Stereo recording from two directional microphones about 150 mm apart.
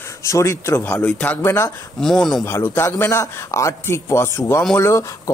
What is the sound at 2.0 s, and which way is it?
Speech, 5° left (ahead or behind).